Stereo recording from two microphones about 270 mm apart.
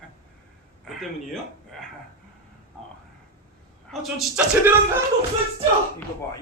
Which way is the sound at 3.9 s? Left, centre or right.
Centre.